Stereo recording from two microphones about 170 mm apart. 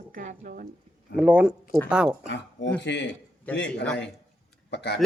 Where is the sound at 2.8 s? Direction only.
90° left.